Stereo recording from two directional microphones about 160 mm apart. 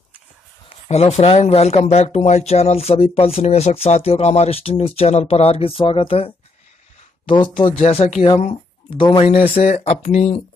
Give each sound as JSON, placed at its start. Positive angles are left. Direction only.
{"t": 0.8, "sound": "speech", "side_deg": 45}
{"t": 7.7, "sound": "speech", "side_deg": 40}